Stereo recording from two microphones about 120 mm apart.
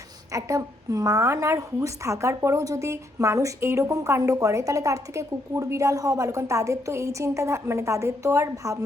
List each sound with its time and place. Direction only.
0.3 s a woman's voice: 25° right (ahead or behind)